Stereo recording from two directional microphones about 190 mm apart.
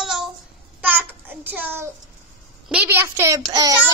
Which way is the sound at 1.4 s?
10° right (ahead or behind).